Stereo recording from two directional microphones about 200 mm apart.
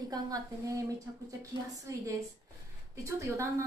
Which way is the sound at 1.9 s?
15° right (ahead or behind).